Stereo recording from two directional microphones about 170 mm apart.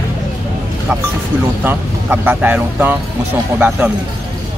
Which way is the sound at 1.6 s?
10° right (ahead or behind).